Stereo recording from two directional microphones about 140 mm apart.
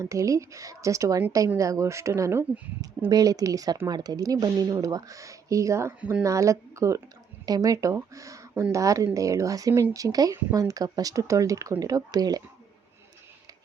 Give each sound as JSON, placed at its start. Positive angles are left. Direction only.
{"t": 0.0, "sound": "speech", "side_deg": -20}
{"t": 6.0, "sound": "speech", "side_deg": -10}
{"t": 6.2, "sound": "speech", "side_deg": -20}